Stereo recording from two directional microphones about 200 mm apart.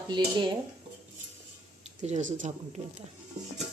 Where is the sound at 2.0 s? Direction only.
35° right (ahead or behind).